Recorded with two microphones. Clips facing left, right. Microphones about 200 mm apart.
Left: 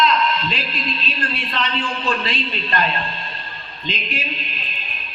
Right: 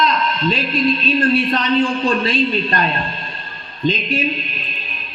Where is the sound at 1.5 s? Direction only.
45° right (ahead or behind).